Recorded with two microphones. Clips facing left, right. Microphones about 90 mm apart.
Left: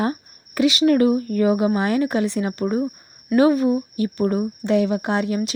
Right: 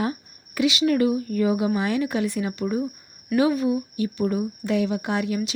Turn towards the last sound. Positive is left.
turn(degrees=40)  # may be behind; listen again after turning